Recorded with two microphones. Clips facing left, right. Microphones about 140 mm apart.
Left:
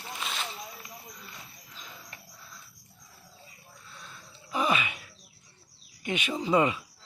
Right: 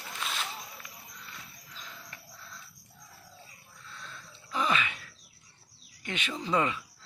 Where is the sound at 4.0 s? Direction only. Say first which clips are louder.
Right 2 dB; 10° left (ahead or behind).